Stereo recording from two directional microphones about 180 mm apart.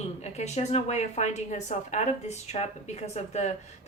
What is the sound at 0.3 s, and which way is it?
Speech, 40° left (ahead or behind).